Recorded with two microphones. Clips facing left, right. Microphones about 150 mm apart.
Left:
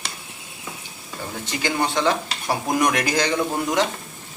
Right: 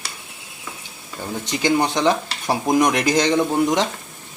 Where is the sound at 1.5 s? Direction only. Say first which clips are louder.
Right 5 dB; 15° right (ahead or behind).